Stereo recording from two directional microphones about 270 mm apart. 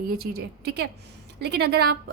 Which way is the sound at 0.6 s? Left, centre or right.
Right.